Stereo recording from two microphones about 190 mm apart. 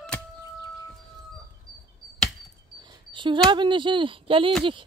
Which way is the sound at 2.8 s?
25° right (ahead or behind).